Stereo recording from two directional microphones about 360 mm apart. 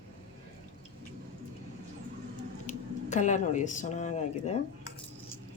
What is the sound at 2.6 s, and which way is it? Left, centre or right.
Speech, centre.